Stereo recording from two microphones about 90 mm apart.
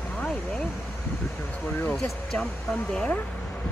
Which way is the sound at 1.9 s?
5° left (ahead or behind).